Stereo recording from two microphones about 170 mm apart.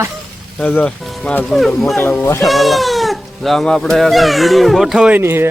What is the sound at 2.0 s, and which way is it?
Speech, 15° left (ahead or behind).